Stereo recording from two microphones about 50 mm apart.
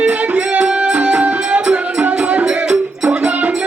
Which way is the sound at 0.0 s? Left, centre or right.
Right.